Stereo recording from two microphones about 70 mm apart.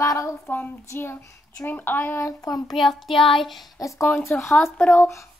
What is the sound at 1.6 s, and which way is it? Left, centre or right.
Speech, left.